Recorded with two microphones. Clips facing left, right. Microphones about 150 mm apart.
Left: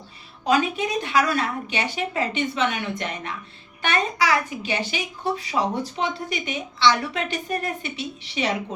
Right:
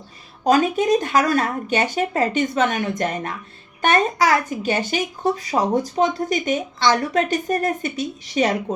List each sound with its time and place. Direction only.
0.4 s a child's voice: 45° right (ahead or behind)